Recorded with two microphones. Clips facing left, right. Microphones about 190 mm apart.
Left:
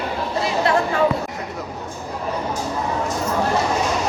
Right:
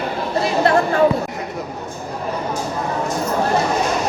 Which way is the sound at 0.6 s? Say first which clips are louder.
Right 4 dB; 55° right (ahead or behind).